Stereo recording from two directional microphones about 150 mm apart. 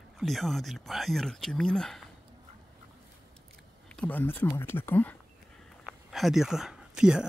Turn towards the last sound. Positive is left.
turn(degrees=-5)  # may be behind; listen again after turning